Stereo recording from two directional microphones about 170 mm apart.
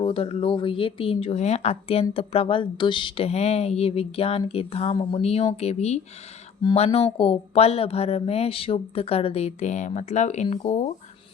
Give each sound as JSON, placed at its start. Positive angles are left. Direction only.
{"t": 0.0, "sound": "speech", "side_deg": 35}